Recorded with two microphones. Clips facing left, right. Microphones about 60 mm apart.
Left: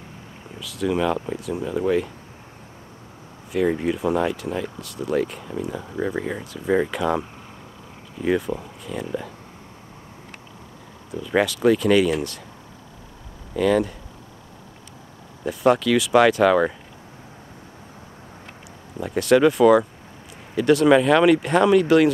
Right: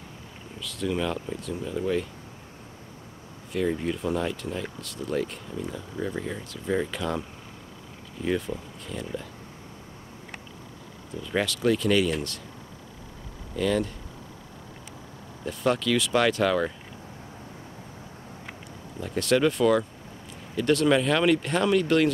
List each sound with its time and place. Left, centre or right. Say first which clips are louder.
0.6 s speech: left 6 dB; centre
3.5 s speech: left 5 dB; centre
5.7 s speech: left 6 dB; left
6.9 s speech: left 7 dB; centre
8.5 s speech: left 6 dB; left
8.8 s speech: left 5 dB; centre
11.2 s speech: left 6 dB; centre
13.6 s speech: left 6 dB; centre
15.4 s speech: left 7 dB; centre
18.9 s speech: left 6 dB; centre